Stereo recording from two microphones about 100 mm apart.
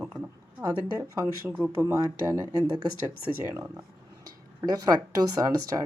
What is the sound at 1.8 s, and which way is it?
A woman's voice, 30° right (ahead or behind).